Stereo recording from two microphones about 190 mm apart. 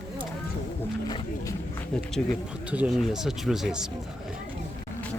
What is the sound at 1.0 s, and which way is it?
Speech, 20° left (ahead or behind).